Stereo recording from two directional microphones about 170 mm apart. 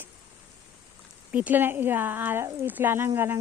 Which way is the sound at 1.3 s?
10° right (ahead or behind).